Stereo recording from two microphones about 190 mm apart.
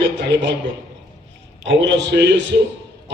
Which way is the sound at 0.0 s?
65° right (ahead or behind).